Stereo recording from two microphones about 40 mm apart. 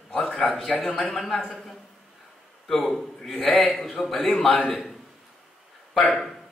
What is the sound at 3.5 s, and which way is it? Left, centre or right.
Speech, centre.